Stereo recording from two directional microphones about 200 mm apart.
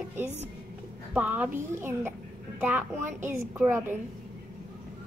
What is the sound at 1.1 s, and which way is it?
A child's voice, 5° right (ahead or behind).